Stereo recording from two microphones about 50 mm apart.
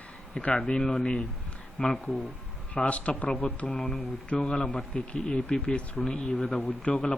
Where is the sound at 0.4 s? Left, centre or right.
Centre.